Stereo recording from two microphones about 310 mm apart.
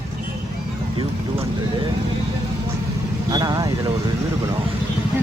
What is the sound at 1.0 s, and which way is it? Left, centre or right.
Speech, centre.